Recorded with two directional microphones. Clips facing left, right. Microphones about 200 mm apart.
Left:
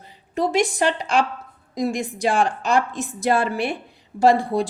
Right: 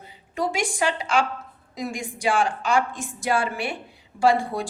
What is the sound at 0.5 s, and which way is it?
Speech, 40° left (ahead or behind).